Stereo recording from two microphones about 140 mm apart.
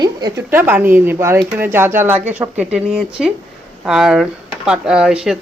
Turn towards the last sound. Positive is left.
turn(degrees=-5)  # may be behind; listen again after turning